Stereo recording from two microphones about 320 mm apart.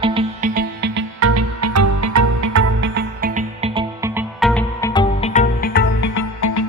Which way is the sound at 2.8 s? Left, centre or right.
Right.